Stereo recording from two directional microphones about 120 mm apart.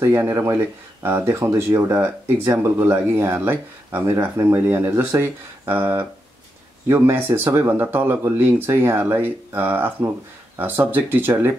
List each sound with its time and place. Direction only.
0.0 s speech: 20° right (ahead or behind)